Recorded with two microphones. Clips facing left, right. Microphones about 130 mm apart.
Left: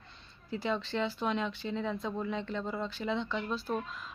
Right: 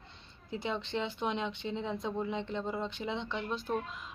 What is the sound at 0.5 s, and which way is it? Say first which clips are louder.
Speech: left 2 dB; 20° right (ahead or behind).